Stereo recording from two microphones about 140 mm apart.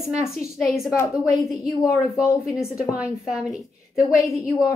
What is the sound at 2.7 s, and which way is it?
Speech, 5° right (ahead or behind).